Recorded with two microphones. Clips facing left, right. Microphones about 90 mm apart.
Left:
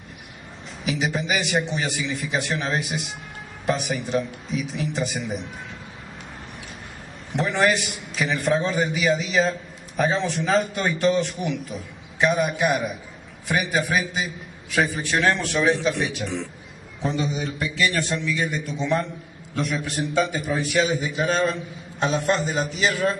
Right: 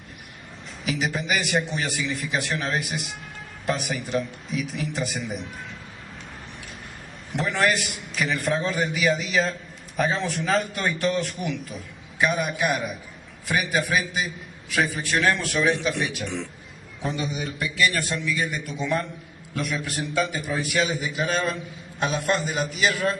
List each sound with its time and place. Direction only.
0.8 s a man's voice: centre (ahead or behind)
7.3 s a man's voice: centre (ahead or behind)
18.8 s a man's voice: 20° left (ahead or behind)
19.5 s a man's voice: centre (ahead or behind)